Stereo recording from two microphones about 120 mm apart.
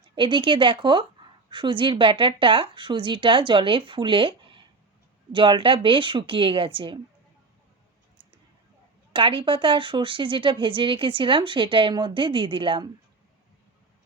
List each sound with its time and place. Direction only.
0.2 s a woman's voice: 45° right (ahead or behind)
9.1 s a woman's voice: 45° right (ahead or behind)